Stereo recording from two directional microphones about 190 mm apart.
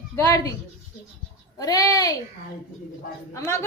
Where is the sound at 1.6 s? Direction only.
20° left (ahead or behind).